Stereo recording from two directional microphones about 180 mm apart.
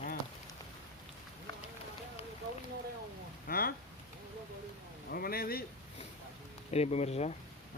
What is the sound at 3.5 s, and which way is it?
Speech, 55° left (ahead or behind).